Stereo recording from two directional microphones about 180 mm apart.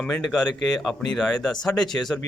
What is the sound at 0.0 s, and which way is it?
Speech, centre (ahead or behind).